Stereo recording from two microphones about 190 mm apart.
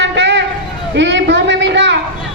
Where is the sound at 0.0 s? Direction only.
70° right (ahead or behind).